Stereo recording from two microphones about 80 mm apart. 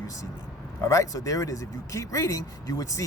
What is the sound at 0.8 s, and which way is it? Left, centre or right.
Speech, left.